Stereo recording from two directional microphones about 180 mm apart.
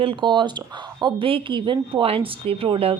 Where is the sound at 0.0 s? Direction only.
30° right (ahead or behind).